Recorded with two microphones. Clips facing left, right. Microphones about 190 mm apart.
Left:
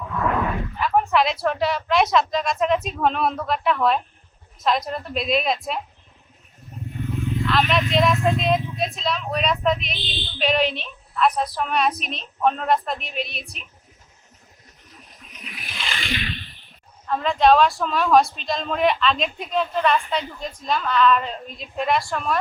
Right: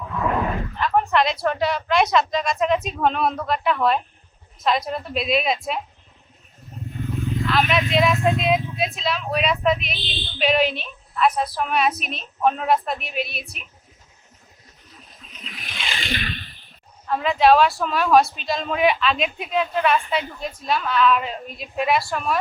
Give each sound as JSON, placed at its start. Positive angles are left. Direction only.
{"t": 0.8, "sound": "a sound", "side_deg": 10}
{"t": 1.1, "sound": "speech", "side_deg": 0}
{"t": 7.4, "sound": "speech", "side_deg": -5}
{"t": 15.3, "sound": "ocean", "side_deg": 10}
{"t": 16.0, "sound": "a sound", "side_deg": -45}
{"t": 17.1, "sound": "speech", "side_deg": -5}